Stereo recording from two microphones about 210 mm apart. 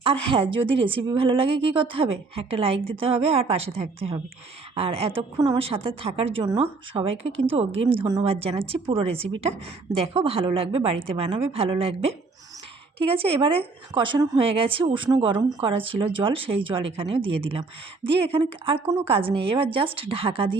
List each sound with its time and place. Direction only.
0.0 s a woman's voice: 25° right (ahead or behind)